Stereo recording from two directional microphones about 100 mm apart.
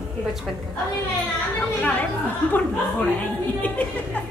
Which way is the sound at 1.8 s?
15° left (ahead or behind).